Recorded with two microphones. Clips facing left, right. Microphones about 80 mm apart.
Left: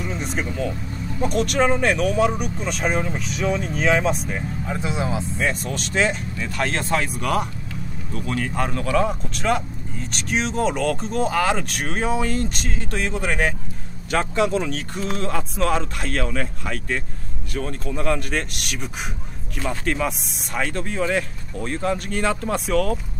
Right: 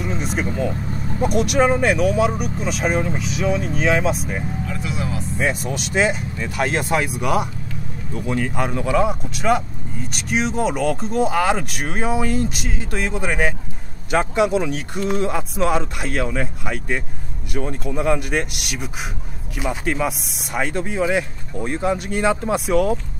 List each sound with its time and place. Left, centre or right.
0.0 s vehicle: centre
1.2 s speech: centre
4.6 s speech: left
5.4 s speech: centre